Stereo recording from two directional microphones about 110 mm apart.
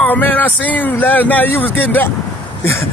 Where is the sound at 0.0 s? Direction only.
15° left (ahead or behind).